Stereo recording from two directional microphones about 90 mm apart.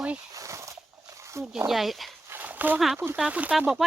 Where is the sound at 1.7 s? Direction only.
Centre (ahead or behind).